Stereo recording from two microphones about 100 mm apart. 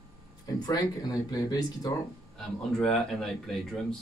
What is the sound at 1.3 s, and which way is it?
Speech, 40° left (ahead or behind).